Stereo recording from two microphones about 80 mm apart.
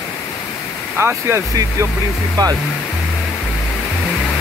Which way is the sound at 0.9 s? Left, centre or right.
Right.